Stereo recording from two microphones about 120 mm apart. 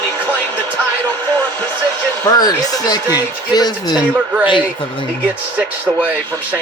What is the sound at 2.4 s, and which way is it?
Speech, 30° left (ahead or behind).